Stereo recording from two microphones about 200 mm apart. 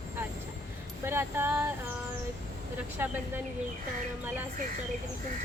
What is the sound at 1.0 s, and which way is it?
Speech, 10° right (ahead or behind).